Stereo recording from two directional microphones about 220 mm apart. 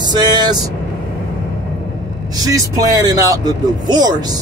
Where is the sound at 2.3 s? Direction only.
15° right (ahead or behind).